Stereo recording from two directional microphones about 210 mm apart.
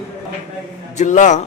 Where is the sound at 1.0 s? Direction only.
35° left (ahead or behind).